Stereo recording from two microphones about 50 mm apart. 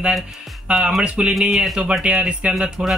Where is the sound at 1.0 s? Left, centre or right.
Centre.